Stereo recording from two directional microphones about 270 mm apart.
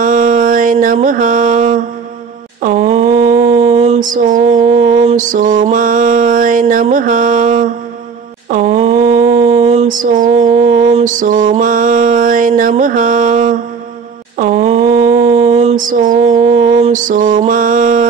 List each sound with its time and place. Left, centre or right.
0.0 s mantra: right
14.4 s a sound: right
16.6 s mantra: right